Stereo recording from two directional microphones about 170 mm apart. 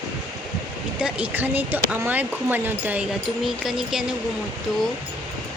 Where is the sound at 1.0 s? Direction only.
10° right (ahead or behind).